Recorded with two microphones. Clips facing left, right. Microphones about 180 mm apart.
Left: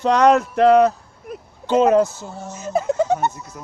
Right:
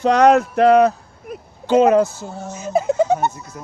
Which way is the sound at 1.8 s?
10° right (ahead or behind).